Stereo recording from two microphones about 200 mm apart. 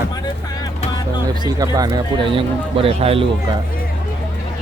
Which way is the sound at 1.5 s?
20° right (ahead or behind).